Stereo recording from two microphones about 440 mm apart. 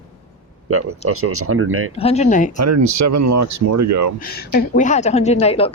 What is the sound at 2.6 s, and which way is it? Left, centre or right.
Speech, right.